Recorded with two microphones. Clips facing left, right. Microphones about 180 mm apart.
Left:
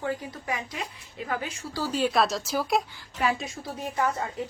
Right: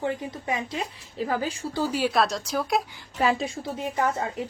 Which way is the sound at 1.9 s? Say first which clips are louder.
Left 1 dB; 5° right (ahead or behind).